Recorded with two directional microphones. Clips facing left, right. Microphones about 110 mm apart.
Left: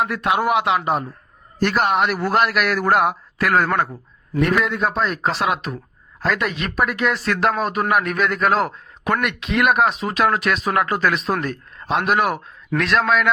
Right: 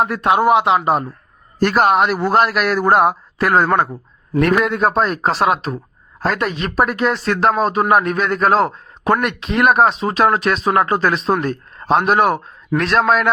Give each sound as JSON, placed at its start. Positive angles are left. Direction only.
{"t": 0.0, "sound": "speech", "side_deg": -35}
{"t": 1.5, "sound": "speech", "side_deg": -40}
{"t": 2.1, "sound": "a man's voice", "side_deg": -30}
{"t": 4.6, "sound": "speech", "side_deg": -45}